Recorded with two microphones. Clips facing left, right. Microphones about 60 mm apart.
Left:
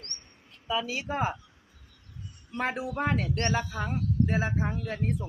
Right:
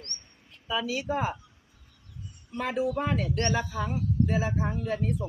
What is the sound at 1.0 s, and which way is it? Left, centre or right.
Speech, left.